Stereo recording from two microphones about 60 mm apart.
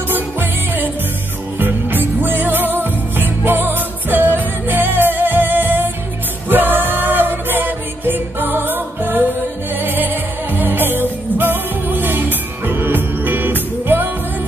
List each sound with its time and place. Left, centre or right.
0.1 s music: right